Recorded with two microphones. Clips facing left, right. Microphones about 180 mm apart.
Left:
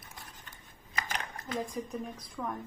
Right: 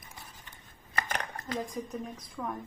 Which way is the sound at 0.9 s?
60° right (ahead or behind).